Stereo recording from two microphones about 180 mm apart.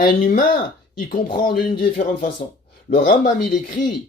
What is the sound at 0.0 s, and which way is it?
Speech, 50° left (ahead or behind).